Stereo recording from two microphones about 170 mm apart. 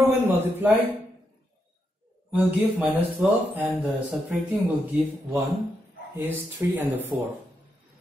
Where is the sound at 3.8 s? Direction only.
Centre (ahead or behind).